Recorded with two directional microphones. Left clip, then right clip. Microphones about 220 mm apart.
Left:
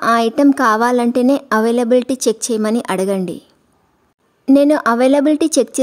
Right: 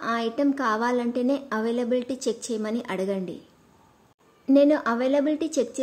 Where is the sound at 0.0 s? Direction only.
50° left (ahead or behind).